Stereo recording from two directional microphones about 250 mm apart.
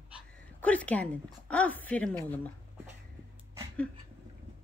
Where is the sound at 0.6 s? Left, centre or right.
Centre.